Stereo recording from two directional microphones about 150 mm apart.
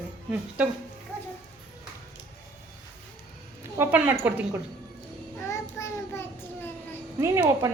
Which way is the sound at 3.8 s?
10° right (ahead or behind).